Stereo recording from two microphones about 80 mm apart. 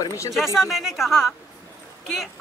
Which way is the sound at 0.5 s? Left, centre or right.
Centre.